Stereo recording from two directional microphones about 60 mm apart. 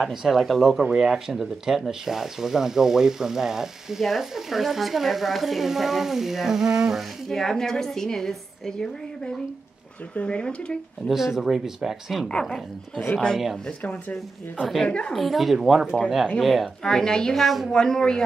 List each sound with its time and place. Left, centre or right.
0.0 s speech: centre
7.2 s a woman's voice: centre
11.1 s speech: centre
12.3 s a woman's voice: centre
15.1 s a woman's voice: centre